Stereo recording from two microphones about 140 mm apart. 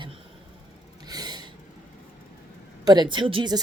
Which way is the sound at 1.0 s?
30° right (ahead or behind).